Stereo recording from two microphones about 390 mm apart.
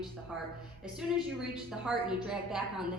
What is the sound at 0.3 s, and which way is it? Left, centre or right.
A woman's voice, centre.